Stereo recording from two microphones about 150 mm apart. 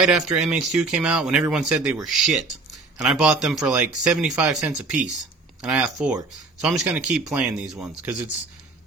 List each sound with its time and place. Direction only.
0.0 s speech: 5° right (ahead or behind)